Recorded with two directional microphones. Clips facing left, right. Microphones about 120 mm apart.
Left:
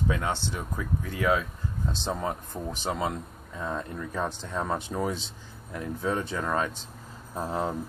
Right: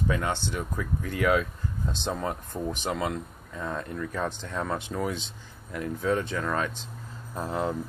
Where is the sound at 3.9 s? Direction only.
15° left (ahead or behind).